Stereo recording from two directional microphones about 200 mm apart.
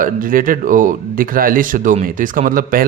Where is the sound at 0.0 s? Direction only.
45° right (ahead or behind).